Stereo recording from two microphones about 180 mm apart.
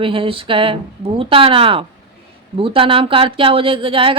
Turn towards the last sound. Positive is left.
turn(degrees=-30)  # may be behind; listen again after turning